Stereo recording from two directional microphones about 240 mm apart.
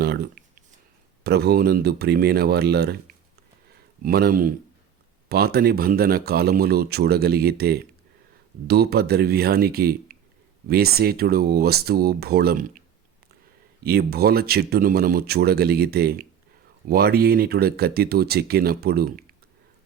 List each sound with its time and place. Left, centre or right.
0.0 s a sound: right
1.2 s speech: right
4.0 s speech: right
13.8 s speech: right